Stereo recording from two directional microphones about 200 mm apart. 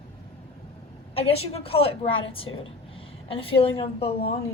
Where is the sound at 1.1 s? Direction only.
30° left (ahead or behind).